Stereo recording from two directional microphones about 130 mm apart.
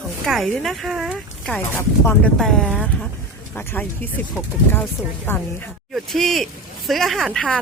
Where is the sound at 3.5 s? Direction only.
15° left (ahead or behind).